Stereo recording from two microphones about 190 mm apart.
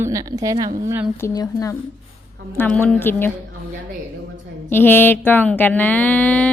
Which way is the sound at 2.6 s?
10° left (ahead or behind).